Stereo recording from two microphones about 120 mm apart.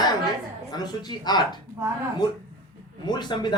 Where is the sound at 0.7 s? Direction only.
35° left (ahead or behind).